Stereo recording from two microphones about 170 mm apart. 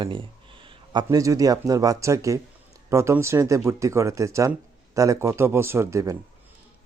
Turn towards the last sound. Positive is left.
turn(degrees=-20)  # may be behind; listen again after turning